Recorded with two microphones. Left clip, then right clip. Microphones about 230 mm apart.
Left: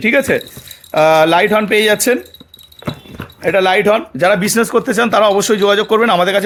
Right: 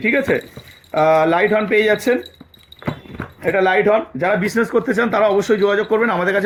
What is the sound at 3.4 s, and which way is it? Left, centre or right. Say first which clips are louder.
Speech: left 3 dB; left.